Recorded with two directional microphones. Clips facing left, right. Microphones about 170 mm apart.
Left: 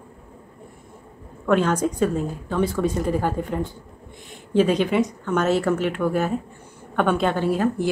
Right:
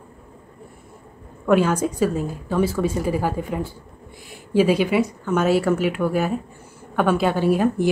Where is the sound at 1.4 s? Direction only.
10° right (ahead or behind).